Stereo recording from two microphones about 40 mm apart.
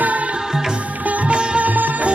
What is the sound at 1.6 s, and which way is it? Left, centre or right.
Music, right.